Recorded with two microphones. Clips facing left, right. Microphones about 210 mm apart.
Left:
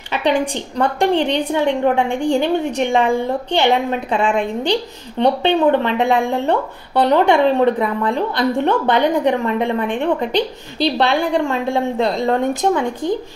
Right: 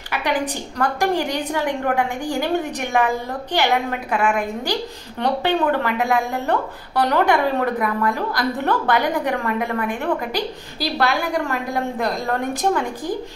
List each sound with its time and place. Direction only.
0.3 s speech: 30° left (ahead or behind)